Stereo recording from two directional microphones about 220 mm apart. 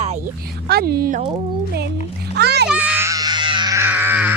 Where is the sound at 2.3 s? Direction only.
50° right (ahead or behind).